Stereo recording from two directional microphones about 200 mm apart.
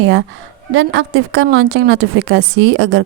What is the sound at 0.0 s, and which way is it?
A woman's voice, 70° right (ahead or behind).